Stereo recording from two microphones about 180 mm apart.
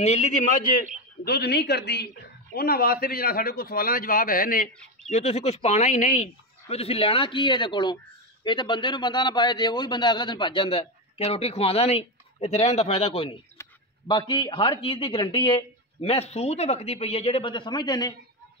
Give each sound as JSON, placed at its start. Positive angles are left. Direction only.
{"t": 0.0, "sound": "a man's voice", "side_deg": 40}
{"t": 1.2, "sound": "a man's voice", "side_deg": 65}
{"t": 5.1, "sound": "a man's voice", "side_deg": 35}